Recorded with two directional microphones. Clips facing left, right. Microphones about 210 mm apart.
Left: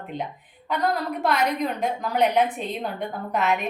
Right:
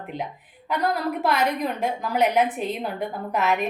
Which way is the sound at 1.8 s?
5° right (ahead or behind).